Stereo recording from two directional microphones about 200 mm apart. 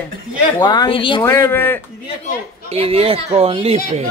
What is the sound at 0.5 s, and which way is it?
Speech, 20° left (ahead or behind).